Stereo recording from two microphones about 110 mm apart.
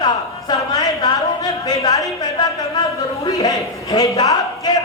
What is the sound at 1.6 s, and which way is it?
Speech, 30° left (ahead or behind).